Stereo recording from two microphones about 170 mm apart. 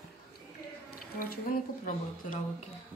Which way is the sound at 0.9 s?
60° left (ahead or behind).